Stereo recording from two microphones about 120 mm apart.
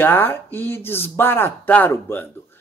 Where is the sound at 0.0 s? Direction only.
15° left (ahead or behind).